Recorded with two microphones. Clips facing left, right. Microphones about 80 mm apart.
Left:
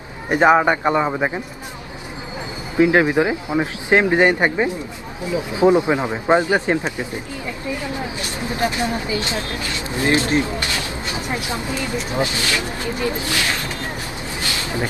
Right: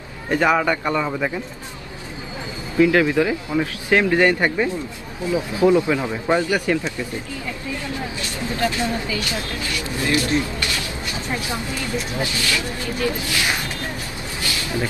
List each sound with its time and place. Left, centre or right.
0.3 s speech: left
2.8 s speech: left
14.6 s a sound: left